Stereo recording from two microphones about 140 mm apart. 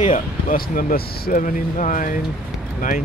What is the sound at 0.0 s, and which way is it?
Speech, 65° left (ahead or behind).